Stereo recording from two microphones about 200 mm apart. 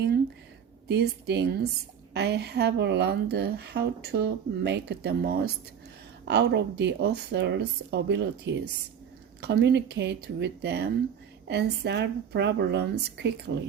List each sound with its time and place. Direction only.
0.9 s a woman's voice: 55° right (ahead or behind)